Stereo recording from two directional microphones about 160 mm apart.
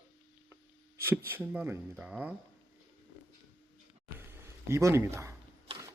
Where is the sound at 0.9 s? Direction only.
15° right (ahead or behind).